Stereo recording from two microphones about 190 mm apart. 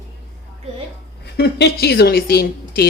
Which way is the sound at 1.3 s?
60° left (ahead or behind).